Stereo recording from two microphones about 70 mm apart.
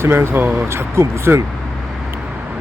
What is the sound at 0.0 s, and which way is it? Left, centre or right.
Speech, right.